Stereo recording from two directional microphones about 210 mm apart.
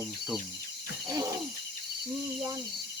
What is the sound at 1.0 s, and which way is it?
Wild animals, 15° right (ahead or behind).